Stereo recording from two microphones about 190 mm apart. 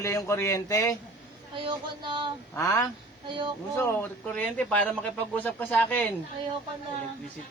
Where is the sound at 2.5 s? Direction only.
15° left (ahead or behind).